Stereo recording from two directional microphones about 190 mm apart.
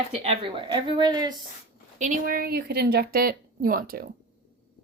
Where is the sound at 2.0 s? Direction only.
45° right (ahead or behind).